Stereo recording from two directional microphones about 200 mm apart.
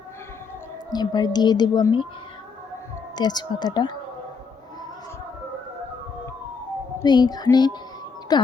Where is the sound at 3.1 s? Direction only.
20° left (ahead or behind).